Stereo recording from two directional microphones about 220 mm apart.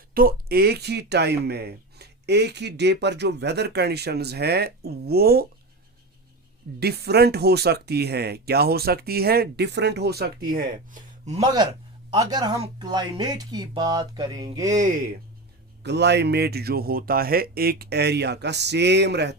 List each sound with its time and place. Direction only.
0.1 s speech: 40° right (ahead or behind)
6.7 s speech: 45° right (ahead or behind)
11.3 s speech: 20° right (ahead or behind)
15.8 s speech: 50° right (ahead or behind)